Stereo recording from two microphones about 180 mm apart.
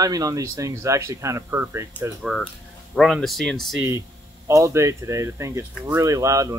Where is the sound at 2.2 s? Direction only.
Centre (ahead or behind).